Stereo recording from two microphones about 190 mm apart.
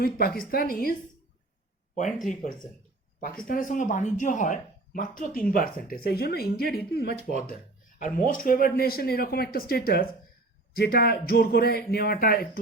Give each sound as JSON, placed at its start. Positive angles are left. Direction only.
{"t": 0.0, "sound": "speech", "side_deg": 50}
{"t": 2.2, "sound": "speech", "side_deg": 40}
{"t": 7.2, "sound": "speech", "side_deg": -35}
{"t": 7.4, "sound": "speech", "side_deg": 45}